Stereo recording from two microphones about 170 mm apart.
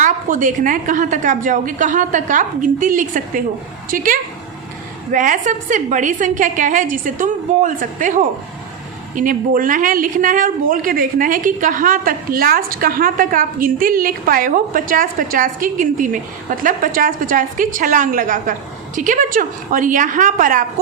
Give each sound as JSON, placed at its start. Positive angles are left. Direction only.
{"t": 0.0, "sound": "speech", "side_deg": -50}